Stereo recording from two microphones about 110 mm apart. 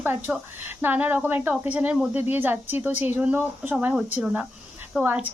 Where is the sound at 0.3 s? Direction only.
10° right (ahead or behind).